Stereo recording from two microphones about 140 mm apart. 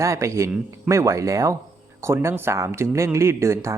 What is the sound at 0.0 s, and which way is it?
Speech, 20° right (ahead or behind).